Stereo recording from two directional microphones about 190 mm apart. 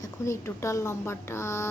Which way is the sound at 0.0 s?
15° left (ahead or behind).